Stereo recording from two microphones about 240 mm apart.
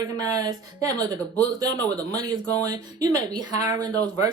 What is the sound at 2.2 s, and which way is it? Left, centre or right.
Speech, centre.